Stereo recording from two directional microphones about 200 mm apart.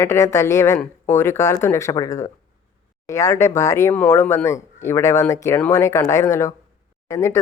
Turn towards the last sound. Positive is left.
turn(degrees=15)  # may be behind; listen again after turning